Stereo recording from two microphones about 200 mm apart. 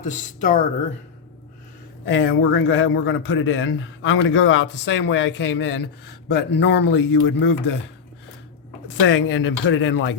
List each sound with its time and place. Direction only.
0.0 s speech: 40° left (ahead or behind)
2.0 s a man's voice: 70° left (ahead or behind)
8.9 s a man's voice: 70° left (ahead or behind)